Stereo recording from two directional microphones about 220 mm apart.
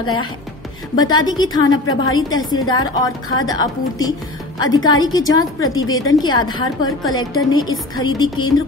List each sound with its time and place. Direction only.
0.9 s a woman's voice: 20° left (ahead or behind)
4.7 s a woman's voice: 70° left (ahead or behind)
5.0 s a woman's voice: 15° left (ahead or behind)